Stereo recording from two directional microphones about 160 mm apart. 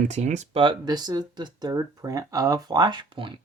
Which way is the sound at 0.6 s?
30° right (ahead or behind).